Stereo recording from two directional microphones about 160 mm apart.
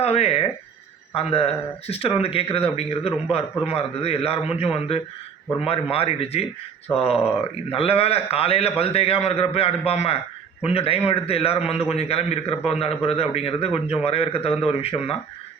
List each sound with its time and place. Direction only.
0.0 s a man's voice: 40° left (ahead or behind)